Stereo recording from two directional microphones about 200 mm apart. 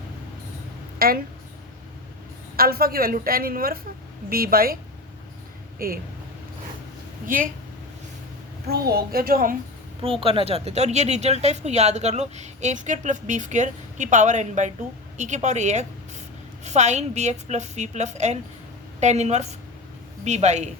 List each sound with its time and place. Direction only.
0.9 s a woman's voice: 50° right (ahead or behind)
2.6 s a woman's voice: 50° right (ahead or behind)
5.8 s a woman's voice: 45° right (ahead or behind)
7.3 s a woman's voice: 45° right (ahead or behind)
8.6 s a woman's voice: 50° right (ahead or behind)
10.0 s speech: 25° right (ahead or behind)